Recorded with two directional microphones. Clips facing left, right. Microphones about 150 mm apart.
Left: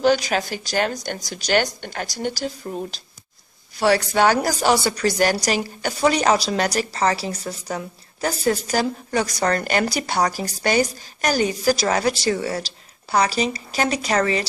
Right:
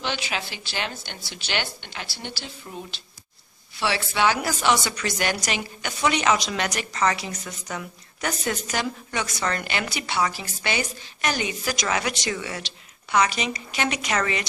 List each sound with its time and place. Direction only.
0.0 s speech: 40° left (ahead or behind)